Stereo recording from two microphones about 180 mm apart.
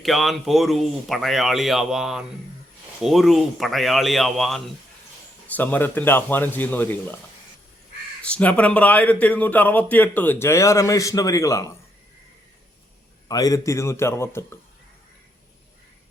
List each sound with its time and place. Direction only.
0.0 s a man's voice: centre (ahead or behind)
8.2 s a man's voice: 5° left (ahead or behind)
13.2 s a man's voice: 20° left (ahead or behind)